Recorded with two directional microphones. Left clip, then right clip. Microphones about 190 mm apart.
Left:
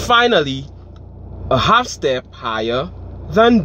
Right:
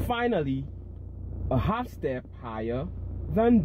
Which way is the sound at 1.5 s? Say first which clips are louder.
Left 16 dB; 60° left (ahead or behind).